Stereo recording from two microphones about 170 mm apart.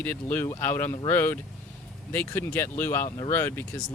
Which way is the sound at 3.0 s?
30° left (ahead or behind).